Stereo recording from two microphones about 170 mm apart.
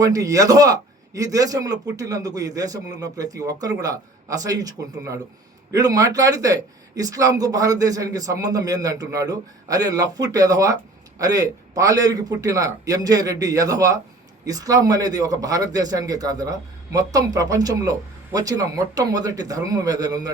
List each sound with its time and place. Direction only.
0.0 s speech: 20° right (ahead or behind)